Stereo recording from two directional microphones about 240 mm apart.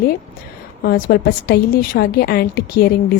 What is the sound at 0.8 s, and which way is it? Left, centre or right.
A woman's voice, left.